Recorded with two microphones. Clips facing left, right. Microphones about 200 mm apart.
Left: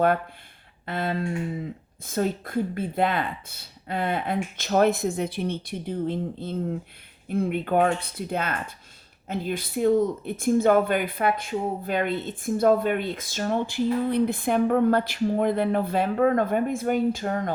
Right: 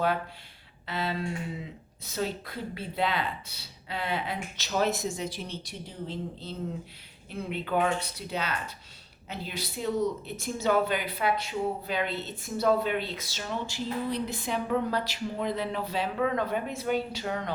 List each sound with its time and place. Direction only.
0.9 s speech: 50° left (ahead or behind)